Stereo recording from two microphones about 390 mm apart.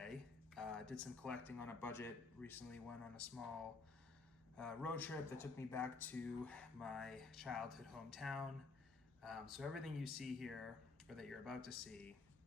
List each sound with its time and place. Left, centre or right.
0.0 s speech: centre
4.5 s a man's voice: centre